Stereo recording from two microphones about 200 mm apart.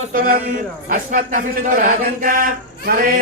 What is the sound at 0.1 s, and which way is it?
Music, 45° right (ahead or behind).